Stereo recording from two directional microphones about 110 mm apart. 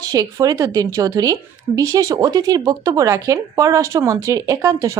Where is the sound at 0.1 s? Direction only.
30° right (ahead or behind).